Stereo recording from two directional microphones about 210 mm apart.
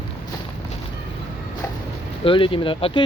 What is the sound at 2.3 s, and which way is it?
Speech, 25° left (ahead or behind).